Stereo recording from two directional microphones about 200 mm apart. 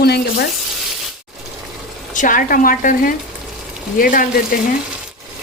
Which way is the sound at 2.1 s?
40° left (ahead or behind).